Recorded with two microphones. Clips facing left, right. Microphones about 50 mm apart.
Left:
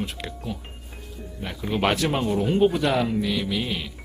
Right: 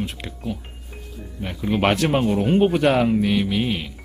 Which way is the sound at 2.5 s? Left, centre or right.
Right.